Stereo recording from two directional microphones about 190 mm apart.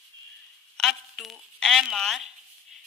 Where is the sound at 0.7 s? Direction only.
Centre (ahead or behind).